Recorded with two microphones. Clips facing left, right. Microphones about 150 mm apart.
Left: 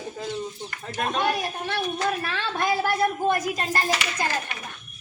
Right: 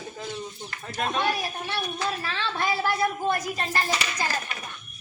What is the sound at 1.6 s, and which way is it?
A woman's voice, 50° left (ahead or behind).